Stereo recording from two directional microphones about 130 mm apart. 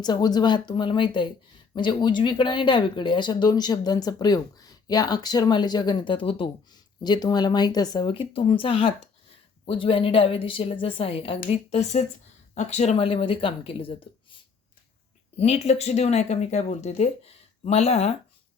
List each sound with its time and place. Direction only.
0.0 s a woman's voice: 30° left (ahead or behind)
15.4 s speech: 55° left (ahead or behind)